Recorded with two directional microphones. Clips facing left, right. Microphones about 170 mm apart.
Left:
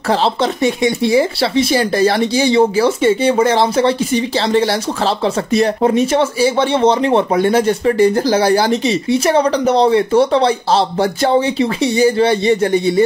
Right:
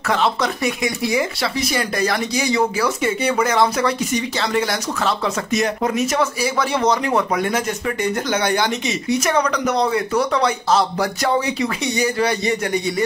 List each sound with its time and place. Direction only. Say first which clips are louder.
0.1 s speech: left 4 dB; 30° left (ahead or behind)